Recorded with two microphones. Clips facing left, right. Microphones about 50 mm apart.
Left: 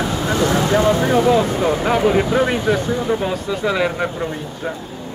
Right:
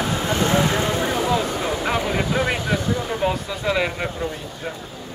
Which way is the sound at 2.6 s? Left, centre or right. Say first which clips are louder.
Left 5 dB; centre.